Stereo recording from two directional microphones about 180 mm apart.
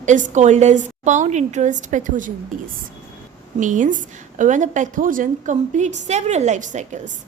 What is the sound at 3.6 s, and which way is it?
A woman's voice, 45° right (ahead or behind).